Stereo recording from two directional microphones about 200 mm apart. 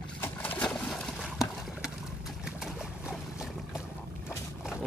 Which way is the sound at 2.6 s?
5° right (ahead or behind).